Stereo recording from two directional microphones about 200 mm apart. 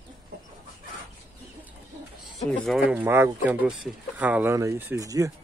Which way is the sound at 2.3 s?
Centre (ahead or behind).